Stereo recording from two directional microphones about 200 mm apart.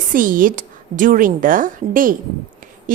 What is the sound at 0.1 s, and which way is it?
A woman's voice, 45° right (ahead or behind).